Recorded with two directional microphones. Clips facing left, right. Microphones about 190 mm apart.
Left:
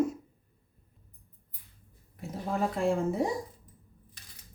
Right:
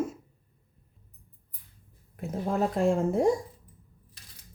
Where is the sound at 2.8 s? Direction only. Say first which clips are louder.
Right 4 dB; 45° right (ahead or behind).